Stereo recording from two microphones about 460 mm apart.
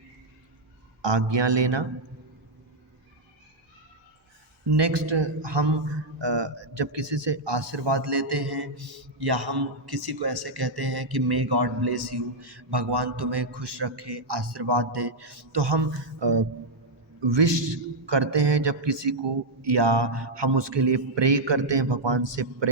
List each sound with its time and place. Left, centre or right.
1.0 s a man's voice: right
4.7 s a man's voice: right